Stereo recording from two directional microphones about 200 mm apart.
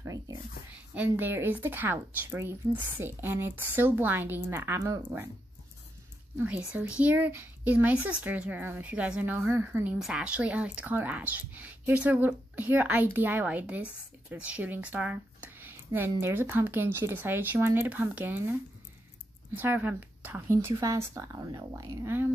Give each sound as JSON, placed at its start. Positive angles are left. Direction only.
{"t": 0.0, "sound": "a sound", "side_deg": -15}
{"t": 0.9, "sound": "a woman's voice", "side_deg": -10}
{"t": 6.3, "sound": "a woman's voice", "side_deg": -5}